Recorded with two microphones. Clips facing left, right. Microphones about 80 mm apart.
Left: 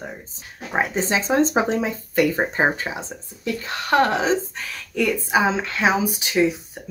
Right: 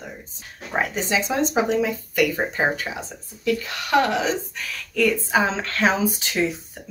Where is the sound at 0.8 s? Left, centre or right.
Left.